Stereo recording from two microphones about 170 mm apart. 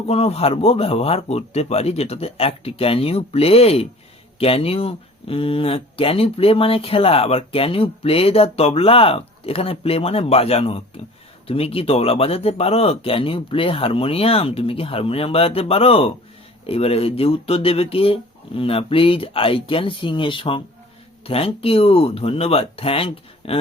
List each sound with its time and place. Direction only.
0.1 s speech: 35° left (ahead or behind)